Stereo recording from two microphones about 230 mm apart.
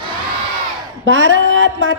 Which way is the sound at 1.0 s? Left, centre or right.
Right.